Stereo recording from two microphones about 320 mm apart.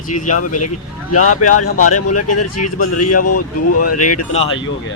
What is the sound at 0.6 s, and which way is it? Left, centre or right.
Speech, left.